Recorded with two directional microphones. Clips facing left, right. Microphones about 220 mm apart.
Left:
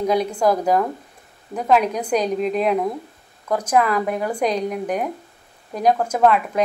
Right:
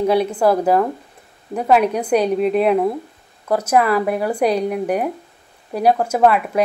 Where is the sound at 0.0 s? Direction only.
5° right (ahead or behind).